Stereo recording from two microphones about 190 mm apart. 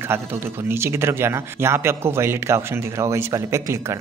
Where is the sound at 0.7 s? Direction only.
15° right (ahead or behind).